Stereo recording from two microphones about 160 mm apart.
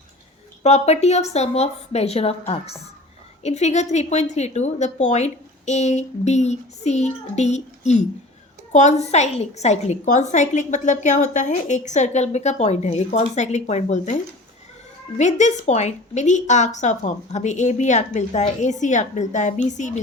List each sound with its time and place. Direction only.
0.6 s a woman's voice: 45° left (ahead or behind)
3.4 s a woman's voice: 45° left (ahead or behind)
15.2 s a woman's voice: 45° left (ahead or behind)